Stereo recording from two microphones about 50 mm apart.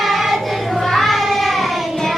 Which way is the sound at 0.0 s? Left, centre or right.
Centre.